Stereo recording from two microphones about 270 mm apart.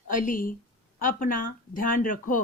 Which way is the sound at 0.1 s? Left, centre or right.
Left.